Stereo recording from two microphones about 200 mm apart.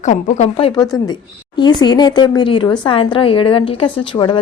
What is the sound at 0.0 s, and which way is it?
Speech, 35° left (ahead or behind).